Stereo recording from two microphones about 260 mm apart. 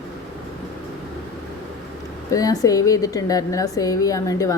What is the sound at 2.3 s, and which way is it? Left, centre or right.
A woman's voice, centre.